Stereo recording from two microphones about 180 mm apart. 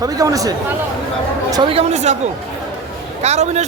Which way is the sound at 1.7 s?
40° right (ahead or behind).